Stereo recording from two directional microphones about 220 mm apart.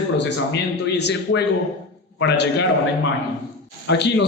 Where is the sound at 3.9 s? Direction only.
50° left (ahead or behind).